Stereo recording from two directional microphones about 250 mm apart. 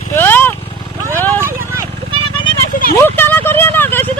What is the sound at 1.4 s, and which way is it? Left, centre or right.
Vehicle, centre.